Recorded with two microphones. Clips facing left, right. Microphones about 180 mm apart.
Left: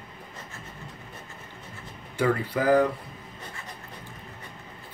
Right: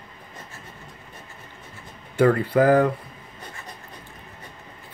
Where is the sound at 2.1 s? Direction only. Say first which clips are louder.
Right 7 dB; 55° right (ahead or behind).